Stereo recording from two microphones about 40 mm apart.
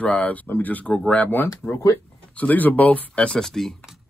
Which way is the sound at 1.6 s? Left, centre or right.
Left.